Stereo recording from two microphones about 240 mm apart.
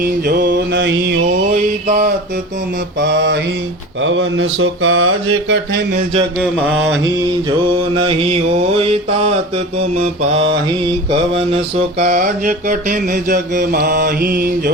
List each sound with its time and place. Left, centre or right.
0.0 s mantra: right
4.0 s speech: right
6.4 s a sound: centre
7.8 s mantra: right
12.0 s mantra: right